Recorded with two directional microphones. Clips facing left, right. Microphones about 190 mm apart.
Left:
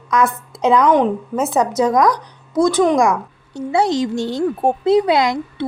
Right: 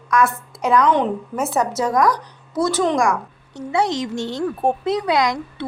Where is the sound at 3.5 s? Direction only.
30° left (ahead or behind).